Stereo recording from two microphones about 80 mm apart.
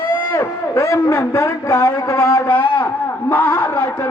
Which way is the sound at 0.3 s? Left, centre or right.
Left.